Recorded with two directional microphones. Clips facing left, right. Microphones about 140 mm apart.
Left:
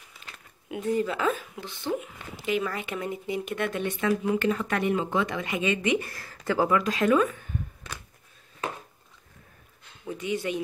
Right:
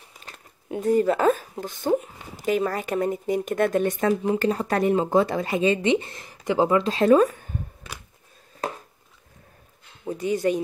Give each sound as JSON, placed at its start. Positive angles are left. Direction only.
{"t": 0.1, "sound": "speech", "side_deg": -40}
{"t": 4.1, "sound": "speech", "side_deg": -30}
{"t": 10.0, "sound": "speech", "side_deg": -40}